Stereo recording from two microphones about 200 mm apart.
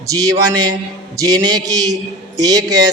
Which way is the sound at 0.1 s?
20° right (ahead or behind).